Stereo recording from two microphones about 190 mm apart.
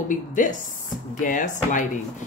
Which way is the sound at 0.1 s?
45° left (ahead or behind).